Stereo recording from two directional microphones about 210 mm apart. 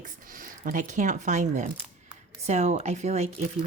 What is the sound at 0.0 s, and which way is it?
Speech, 40° right (ahead or behind).